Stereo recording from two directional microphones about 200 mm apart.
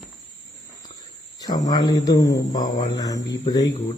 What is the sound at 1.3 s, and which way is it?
Speech, 20° left (ahead or behind).